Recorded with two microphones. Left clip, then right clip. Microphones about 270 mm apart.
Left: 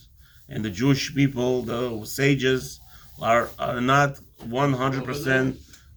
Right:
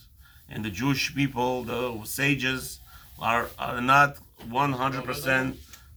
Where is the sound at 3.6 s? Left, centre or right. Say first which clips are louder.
Left 4 dB; right.